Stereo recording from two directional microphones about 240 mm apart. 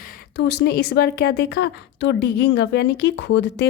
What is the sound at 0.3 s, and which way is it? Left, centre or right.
A woman's voice, left.